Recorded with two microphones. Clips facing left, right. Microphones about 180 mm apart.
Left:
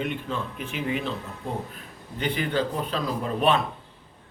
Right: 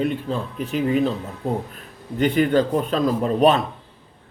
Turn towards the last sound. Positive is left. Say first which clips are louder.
# right 6 dB
turn(degrees=-40)  # may be behind; listen again after turning